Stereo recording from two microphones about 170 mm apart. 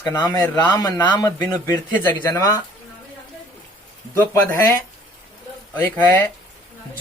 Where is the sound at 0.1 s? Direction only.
15° left (ahead or behind).